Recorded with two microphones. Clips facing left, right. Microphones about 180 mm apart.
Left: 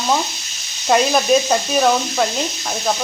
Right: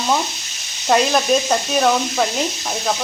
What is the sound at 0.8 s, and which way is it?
Frying, 5° left (ahead or behind).